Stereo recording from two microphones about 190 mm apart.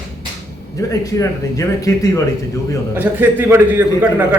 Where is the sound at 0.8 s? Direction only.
15° left (ahead or behind).